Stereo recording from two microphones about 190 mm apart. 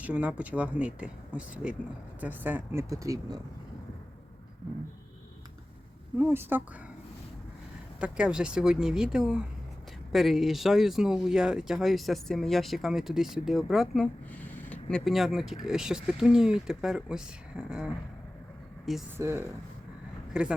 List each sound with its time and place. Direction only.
0.0 s speech: 5° right (ahead or behind)
6.1 s speech: 10° right (ahead or behind)
8.0 s speech: 5° right (ahead or behind)
19.1 s speech: 10° right (ahead or behind)